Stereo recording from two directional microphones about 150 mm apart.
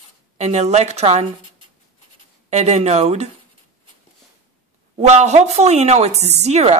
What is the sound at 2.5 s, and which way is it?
Speech, 50° right (ahead or behind).